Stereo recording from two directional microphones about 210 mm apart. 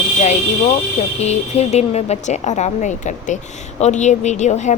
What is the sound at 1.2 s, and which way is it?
Speech, 30° left (ahead or behind).